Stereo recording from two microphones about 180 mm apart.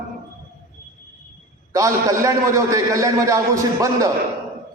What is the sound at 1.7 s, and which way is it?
A man's voice, 20° right (ahead or behind).